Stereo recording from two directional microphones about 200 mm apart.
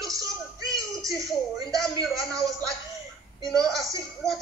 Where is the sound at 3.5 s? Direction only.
Centre (ahead or behind).